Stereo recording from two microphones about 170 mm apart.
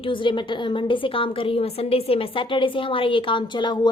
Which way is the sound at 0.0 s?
30° left (ahead or behind).